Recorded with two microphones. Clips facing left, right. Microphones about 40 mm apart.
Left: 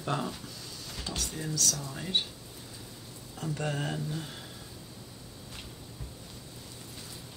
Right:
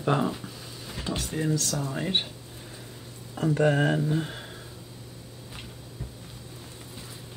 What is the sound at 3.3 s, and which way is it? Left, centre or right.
Speech, right.